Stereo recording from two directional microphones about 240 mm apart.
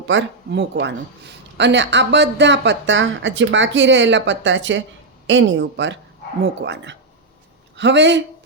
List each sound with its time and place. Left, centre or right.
0.1 s speech: right